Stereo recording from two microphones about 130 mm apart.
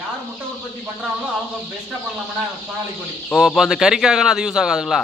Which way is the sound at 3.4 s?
5° right (ahead or behind).